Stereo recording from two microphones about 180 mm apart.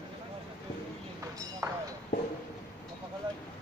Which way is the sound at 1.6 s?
15° right (ahead or behind).